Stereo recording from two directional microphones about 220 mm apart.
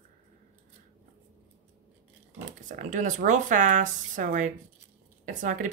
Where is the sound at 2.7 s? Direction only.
35° right (ahead or behind).